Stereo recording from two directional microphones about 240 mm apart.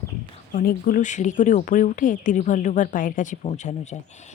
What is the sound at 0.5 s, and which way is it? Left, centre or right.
Speech, left.